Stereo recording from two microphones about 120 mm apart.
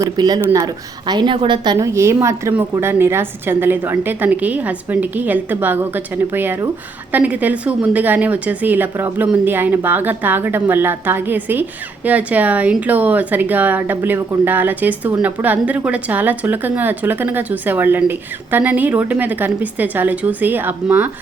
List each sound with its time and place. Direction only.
0.0 s a woman's voice: 35° right (ahead or behind); by 21.1 s 15° right (ahead or behind)